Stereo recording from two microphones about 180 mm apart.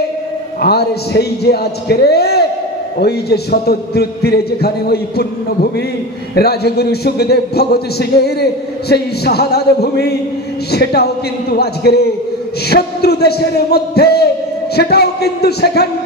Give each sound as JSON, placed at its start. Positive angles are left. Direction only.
{"t": 0.6, "sound": "a man's voice", "side_deg": 60}